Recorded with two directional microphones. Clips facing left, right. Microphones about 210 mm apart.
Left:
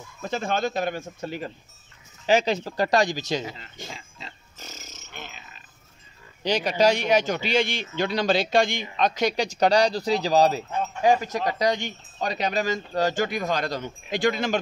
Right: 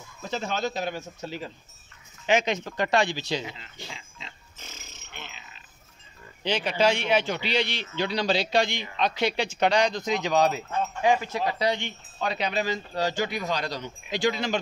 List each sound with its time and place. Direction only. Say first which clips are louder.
0.2 s a man's voice: left 3 dB; 50° left (ahead or behind)
2.2 s a sound: left 3 dB; 35° left (ahead or behind)
6.4 s a man's voice: left 3 dB; 40° left (ahead or behind)